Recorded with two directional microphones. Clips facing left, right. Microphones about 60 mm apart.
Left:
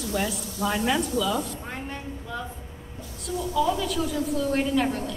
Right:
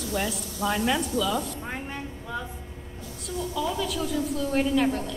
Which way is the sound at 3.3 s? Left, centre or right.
Centre.